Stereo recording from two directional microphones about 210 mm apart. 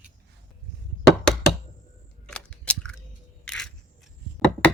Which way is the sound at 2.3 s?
5° left (ahead or behind).